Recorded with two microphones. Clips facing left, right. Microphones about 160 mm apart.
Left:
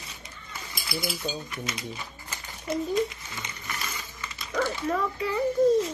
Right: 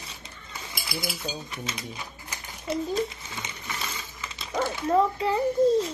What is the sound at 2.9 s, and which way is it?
A child's voice, 30° right (ahead or behind).